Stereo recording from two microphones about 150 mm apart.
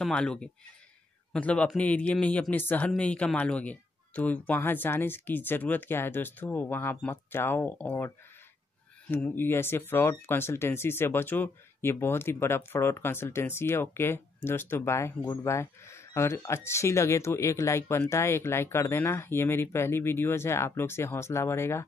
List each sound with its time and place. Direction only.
0.0 s speech: 5° left (ahead or behind)
9.1 s speech: 15° left (ahead or behind)